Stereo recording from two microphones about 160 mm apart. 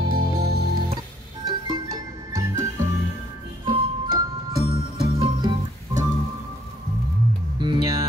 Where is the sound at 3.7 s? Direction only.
25° right (ahead or behind).